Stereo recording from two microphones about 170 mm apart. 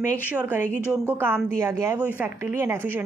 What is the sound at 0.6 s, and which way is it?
Speech, 10° left (ahead or behind).